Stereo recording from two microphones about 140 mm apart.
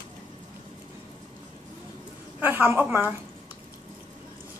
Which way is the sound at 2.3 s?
15° right (ahead or behind).